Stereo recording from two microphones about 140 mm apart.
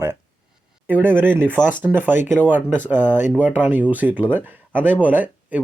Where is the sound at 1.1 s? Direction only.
15° right (ahead or behind).